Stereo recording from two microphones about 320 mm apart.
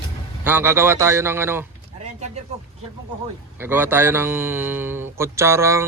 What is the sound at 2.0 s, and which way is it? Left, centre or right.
Speech, right.